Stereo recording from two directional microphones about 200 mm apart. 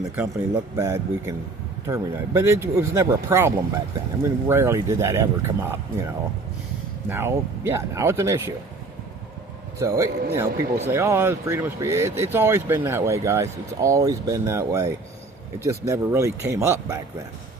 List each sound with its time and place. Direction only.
0.2 s speech: 10° right (ahead or behind)
7.1 s speech: 10° right (ahead or behind)
9.7 s speech: 15° right (ahead or behind)